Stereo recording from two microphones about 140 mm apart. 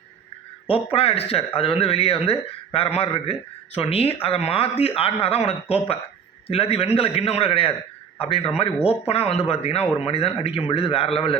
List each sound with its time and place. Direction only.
0.7 s a man's voice: 40° left (ahead or behind)